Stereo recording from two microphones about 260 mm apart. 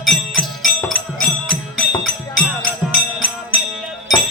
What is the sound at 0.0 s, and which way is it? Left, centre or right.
Music, centre.